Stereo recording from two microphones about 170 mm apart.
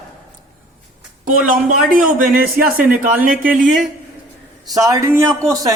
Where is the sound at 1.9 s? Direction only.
55° right (ahead or behind).